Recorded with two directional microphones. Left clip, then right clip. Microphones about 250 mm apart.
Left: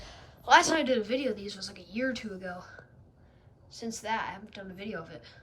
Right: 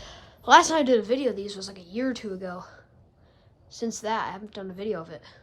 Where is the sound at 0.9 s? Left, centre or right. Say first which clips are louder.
Right 6 dB; centre.